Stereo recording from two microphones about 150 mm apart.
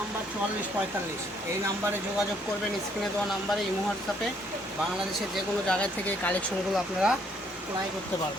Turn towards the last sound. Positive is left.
turn(degrees=-5)  # may be behind; listen again after turning